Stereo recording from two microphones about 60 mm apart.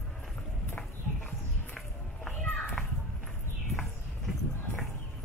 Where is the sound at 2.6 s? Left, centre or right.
Left.